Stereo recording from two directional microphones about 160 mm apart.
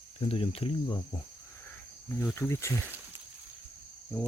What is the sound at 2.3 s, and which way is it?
Speech, 15° left (ahead or behind).